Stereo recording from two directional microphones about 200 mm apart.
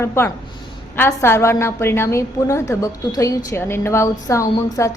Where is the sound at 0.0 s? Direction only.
10° left (ahead or behind).